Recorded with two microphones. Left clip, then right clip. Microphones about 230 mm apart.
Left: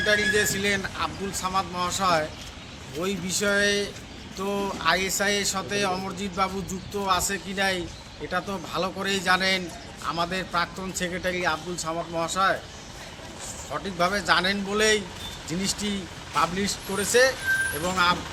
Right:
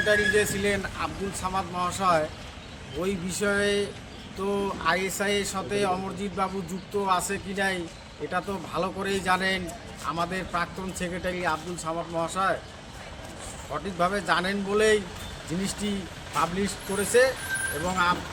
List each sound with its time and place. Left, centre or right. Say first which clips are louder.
0.0 s speech: even; centre
13.7 s speech: left 1 dB; centre